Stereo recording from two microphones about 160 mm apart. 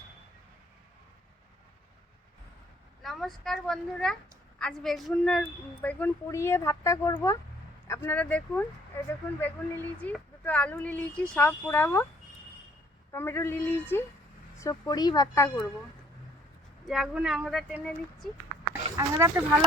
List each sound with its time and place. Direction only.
3.0 s a woman's voice: centre (ahead or behind)
13.1 s a woman's voice: 15° left (ahead or behind)
16.8 s speech: centre (ahead or behind)
18.7 s speech: 20° right (ahead or behind)